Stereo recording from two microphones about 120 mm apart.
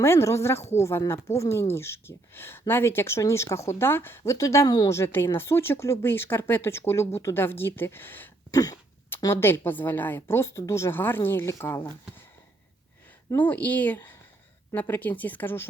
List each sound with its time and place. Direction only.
0.0 s speech: 20° left (ahead or behind)
4.9 s speech: 20° left (ahead or behind)
8.4 s throat clearing: 30° left (ahead or behind)
9.2 s speech: 20° left (ahead or behind)
13.3 s speech: 15° left (ahead or behind)